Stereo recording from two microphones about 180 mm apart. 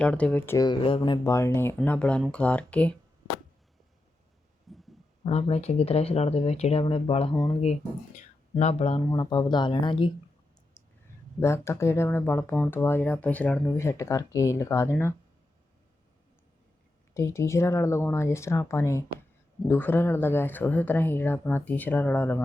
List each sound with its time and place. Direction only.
0.0 s speech: 5° left (ahead or behind)
4.7 s a sound: centre (ahead or behind)
5.2 s speech: 35° left (ahead or behind)
9.1 s speech: 25° left (ahead or behind)
11.3 s speech: 15° left (ahead or behind)
17.2 s speech: 15° left (ahead or behind)